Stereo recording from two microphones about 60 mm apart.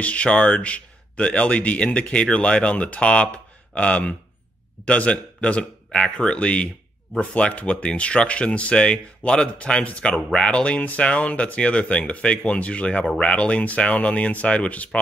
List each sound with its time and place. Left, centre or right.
0.0 s speech: left